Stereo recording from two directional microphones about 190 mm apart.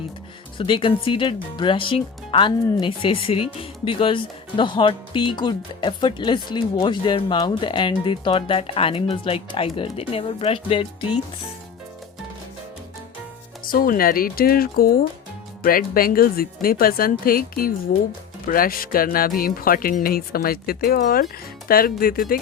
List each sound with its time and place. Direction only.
0.5 s speech: 25° left (ahead or behind)
13.7 s speech: 50° left (ahead or behind)